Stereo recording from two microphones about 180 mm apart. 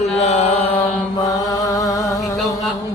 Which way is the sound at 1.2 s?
20° left (ahead or behind).